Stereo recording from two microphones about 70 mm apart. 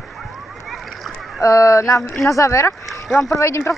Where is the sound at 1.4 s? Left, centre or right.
Left.